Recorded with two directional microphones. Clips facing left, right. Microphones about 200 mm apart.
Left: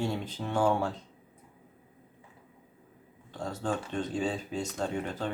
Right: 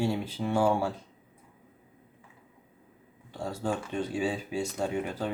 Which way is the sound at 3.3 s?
10° right (ahead or behind).